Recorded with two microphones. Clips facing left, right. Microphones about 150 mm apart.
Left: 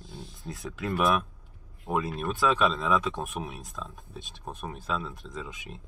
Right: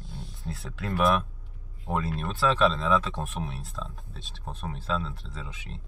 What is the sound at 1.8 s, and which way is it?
Speech, 15° left (ahead or behind).